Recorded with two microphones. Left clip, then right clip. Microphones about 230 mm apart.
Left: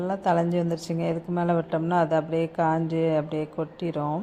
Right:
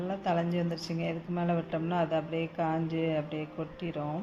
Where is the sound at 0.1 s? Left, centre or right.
Left.